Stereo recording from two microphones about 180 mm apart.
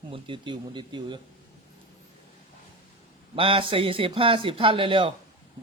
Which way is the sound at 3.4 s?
30° right (ahead or behind).